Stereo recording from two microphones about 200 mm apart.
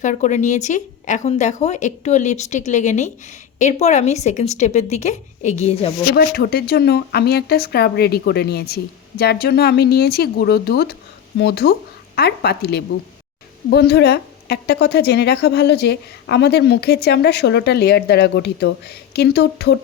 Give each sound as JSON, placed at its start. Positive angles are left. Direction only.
{"t": 0.0, "sound": "speech", "side_deg": 40}
{"t": 6.1, "sound": "speech", "side_deg": 50}